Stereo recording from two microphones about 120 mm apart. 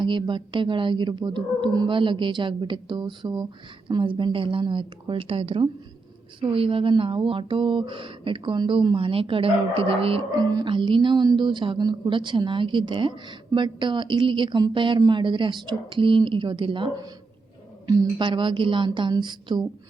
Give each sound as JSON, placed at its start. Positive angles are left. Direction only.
{"t": 0.0, "sound": "a woman's voice", "side_deg": -40}
{"t": 10.5, "sound": "a woman's voice", "side_deg": -40}